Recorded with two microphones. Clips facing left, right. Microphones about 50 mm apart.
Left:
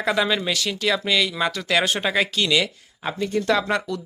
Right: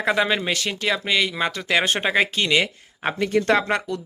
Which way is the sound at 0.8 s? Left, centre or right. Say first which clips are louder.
Even; right.